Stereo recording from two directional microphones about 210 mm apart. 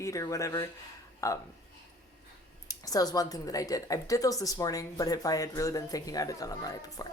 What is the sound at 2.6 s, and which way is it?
Speech, 15° left (ahead or behind).